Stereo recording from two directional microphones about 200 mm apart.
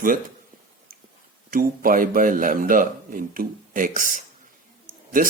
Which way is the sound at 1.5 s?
45° right (ahead or behind).